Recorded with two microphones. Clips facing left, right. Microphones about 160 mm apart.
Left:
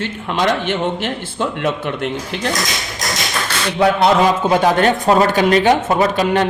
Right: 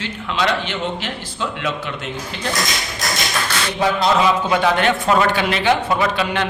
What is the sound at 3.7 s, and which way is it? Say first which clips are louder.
Speech: left 5 dB; 65° left (ahead or behind).